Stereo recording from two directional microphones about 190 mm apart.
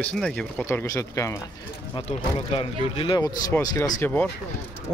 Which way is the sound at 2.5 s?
30° left (ahead or behind).